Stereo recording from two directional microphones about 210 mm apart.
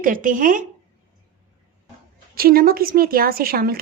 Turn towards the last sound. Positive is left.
turn(degrees=-45)  # may be behind; listen again after turning